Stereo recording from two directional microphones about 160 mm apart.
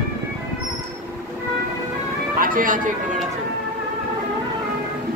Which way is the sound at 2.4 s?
60° right (ahead or behind).